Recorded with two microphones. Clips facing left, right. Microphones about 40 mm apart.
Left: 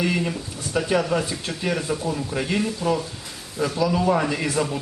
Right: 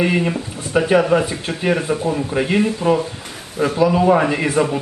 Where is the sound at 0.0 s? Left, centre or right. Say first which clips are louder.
Right 6 dB; right.